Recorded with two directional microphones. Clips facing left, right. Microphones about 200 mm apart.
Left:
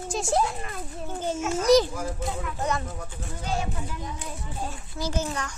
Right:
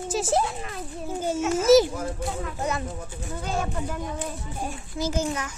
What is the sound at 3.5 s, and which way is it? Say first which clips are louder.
Speech: right 2 dB; 50° right (ahead or behind).